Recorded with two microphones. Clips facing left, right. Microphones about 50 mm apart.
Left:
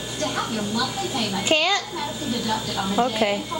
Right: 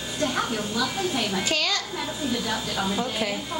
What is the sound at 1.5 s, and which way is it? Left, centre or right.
Speech, left.